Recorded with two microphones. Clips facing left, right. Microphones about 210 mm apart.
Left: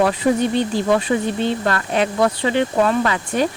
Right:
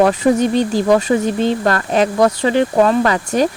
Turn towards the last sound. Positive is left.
turn(degrees=-40)  # may be behind; listen again after turning